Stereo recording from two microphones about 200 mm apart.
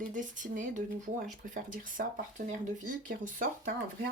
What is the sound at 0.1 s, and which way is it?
Speech, 40° right (ahead or behind).